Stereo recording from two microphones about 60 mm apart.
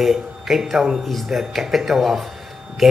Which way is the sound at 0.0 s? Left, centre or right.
Centre.